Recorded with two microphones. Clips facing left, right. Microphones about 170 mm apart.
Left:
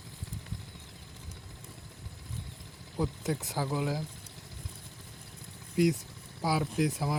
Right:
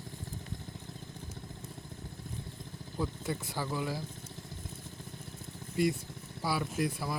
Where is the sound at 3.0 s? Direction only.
20° left (ahead or behind).